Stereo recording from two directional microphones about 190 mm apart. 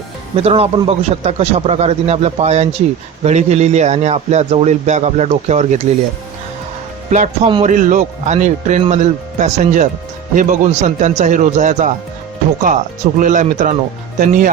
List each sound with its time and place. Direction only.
0.3 s a man's voice: 30° right (ahead or behind)
7.1 s a man's voice: 40° right (ahead or behind)
13.1 s speech: 40° right (ahead or behind)